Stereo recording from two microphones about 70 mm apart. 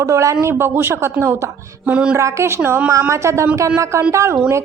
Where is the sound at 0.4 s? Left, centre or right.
Right.